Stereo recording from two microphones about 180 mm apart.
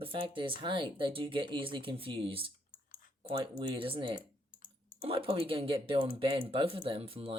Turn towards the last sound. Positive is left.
turn(degrees=-30)  # may be behind; listen again after turning